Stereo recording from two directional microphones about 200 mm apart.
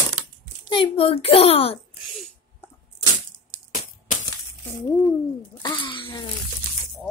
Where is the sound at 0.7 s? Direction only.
25° left (ahead or behind).